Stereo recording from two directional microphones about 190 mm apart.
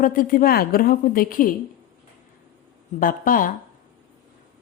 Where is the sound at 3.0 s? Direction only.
45° left (ahead or behind).